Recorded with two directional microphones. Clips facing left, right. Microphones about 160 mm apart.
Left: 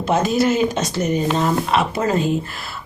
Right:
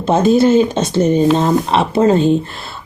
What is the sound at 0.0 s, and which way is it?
Speech, 30° right (ahead or behind).